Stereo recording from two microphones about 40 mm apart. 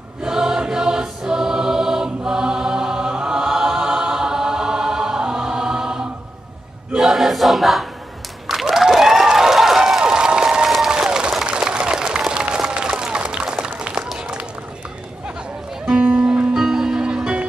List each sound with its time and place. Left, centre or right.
0.2 s choir: centre
7.0 s choir: centre
8.5 s crowd: centre
8.9 s a sound: centre
10.9 s applause: centre
14.1 s run: centre
16.2 s music: right